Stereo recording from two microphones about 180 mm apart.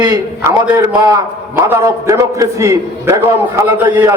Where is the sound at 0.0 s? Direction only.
20° right (ahead or behind).